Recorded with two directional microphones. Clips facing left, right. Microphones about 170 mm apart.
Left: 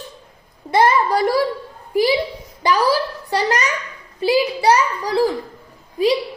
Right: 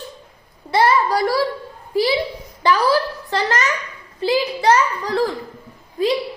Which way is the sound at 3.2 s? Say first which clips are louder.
Left 1 dB; 15° left (ahead or behind).